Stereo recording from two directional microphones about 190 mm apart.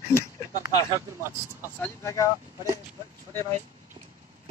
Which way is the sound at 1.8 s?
15° left (ahead or behind).